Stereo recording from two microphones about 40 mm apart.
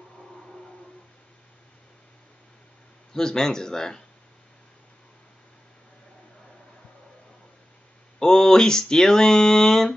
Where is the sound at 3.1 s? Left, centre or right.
Centre.